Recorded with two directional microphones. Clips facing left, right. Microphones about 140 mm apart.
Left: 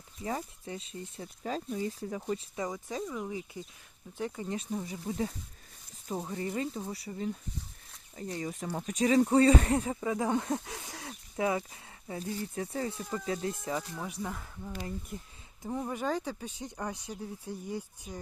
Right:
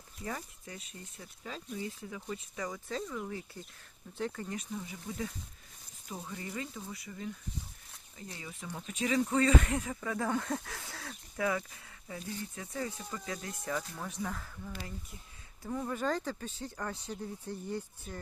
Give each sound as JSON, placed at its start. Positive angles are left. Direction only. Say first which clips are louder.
{"t": 0.3, "sound": "speech", "louder": "left 5 dB", "side_deg": 25}
{"t": 2.6, "sound": "speech", "louder": "left 1 dB", "side_deg": 15}
{"t": 4.7, "sound": "speech", "louder": "left 5 dB", "side_deg": 35}
{"t": 10.1, "sound": "speech", "louder": "left 3 dB", "side_deg": 20}
{"t": 14.3, "sound": "speech", "louder": "left 3 dB", "side_deg": 20}
{"t": 15.1, "sound": "speech", "louder": "left 11 dB", "side_deg": 45}
{"t": 15.6, "sound": "speech", "louder": "left 2 dB", "side_deg": 25}
{"t": 15.9, "sound": "speech", "louder": "even", "side_deg": 10}